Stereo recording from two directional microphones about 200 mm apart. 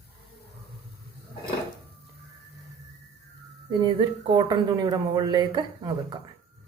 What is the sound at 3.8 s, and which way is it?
A woman's voice, 20° right (ahead or behind).